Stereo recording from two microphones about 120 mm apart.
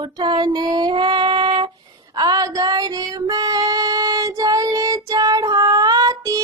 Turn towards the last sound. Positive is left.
turn(degrees=-30)  # may be behind; listen again after turning